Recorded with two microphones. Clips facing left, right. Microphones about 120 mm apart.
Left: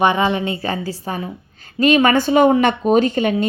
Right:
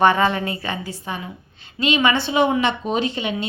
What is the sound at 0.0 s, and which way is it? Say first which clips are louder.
A woman's voice: left 1 dB; 15° left (ahead or behind).